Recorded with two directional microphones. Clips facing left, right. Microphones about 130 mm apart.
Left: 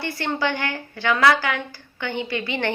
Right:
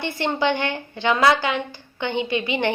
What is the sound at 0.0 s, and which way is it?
A woman's voice, 20° right (ahead or behind).